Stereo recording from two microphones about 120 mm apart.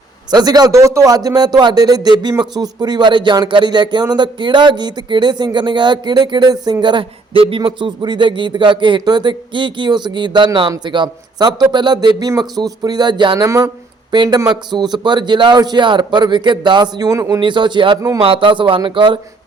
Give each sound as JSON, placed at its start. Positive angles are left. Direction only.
{"t": 0.3, "sound": "speech", "side_deg": -35}
{"t": 13.4, "sound": "speech", "side_deg": -25}
{"t": 14.1, "sound": "speech", "side_deg": -35}
{"t": 17.4, "sound": "speech", "side_deg": -40}